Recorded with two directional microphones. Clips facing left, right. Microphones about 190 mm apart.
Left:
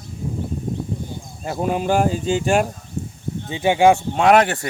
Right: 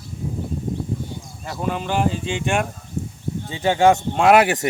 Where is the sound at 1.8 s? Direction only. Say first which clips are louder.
Left 4 dB; 45° left (ahead or behind).